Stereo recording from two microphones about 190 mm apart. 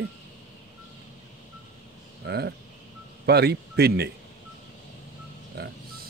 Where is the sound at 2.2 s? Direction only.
60° right (ahead or behind).